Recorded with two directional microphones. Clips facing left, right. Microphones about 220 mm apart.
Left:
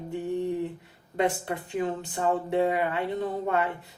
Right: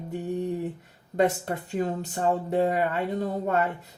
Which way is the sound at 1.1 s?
40° right (ahead or behind).